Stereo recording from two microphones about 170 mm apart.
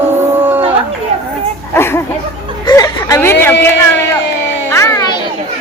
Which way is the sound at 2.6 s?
20° left (ahead or behind).